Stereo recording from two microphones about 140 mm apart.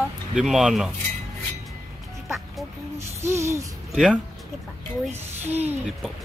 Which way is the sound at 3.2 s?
20° right (ahead or behind).